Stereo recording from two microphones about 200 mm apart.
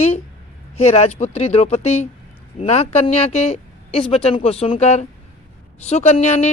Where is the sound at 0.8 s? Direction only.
30° left (ahead or behind).